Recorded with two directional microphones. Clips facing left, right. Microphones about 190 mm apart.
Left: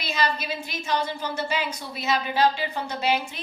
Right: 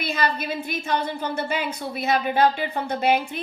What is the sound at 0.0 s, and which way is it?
A woman's voice, 55° right (ahead or behind).